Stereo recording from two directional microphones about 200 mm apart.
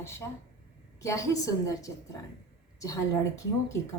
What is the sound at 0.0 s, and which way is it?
A woman's voice, 15° left (ahead or behind).